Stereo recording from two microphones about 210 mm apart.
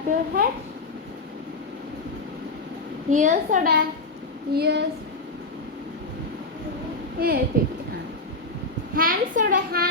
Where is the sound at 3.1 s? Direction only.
35° right (ahead or behind).